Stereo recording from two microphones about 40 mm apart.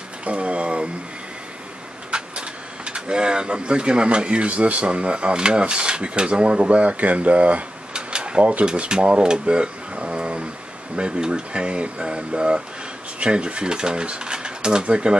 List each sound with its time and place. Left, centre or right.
0.2 s speech: right
2.0 s speech: right
7.9 s a sound: right
8.6 s speech: right